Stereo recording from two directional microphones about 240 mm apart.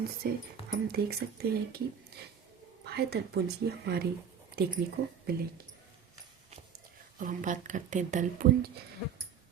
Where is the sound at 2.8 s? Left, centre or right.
Right.